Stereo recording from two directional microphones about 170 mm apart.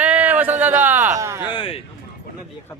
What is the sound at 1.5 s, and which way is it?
Speech, 30° left (ahead or behind).